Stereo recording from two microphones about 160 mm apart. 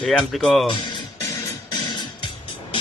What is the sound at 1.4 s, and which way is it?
Music, 25° left (ahead or behind).